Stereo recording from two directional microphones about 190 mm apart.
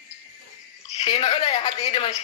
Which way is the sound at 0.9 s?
30° left (ahead or behind).